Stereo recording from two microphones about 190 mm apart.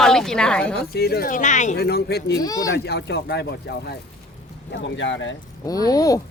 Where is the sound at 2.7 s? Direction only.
60° left (ahead or behind).